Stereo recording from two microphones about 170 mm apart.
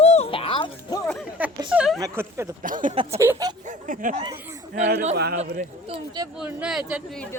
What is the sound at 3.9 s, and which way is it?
Speech, 50° right (ahead or behind).